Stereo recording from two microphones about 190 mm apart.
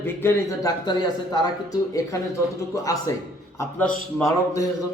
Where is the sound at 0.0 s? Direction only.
15° left (ahead or behind).